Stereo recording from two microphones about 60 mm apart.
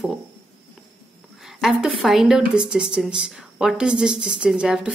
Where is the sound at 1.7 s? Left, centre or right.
Centre.